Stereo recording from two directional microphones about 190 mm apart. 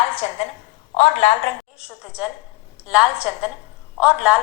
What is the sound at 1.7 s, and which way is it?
A woman's voice, 5° right (ahead or behind).